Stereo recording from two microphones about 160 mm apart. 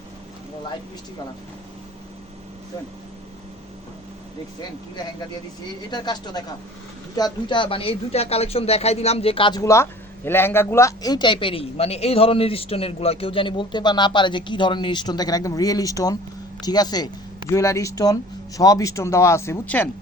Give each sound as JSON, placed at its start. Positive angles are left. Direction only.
{"t": 5.9, "sound": "speech", "side_deg": 25}